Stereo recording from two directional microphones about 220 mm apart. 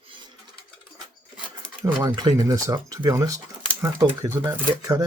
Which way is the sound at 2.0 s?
15° right (ahead or behind).